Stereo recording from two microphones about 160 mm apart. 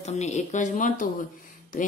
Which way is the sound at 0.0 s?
45° left (ahead or behind).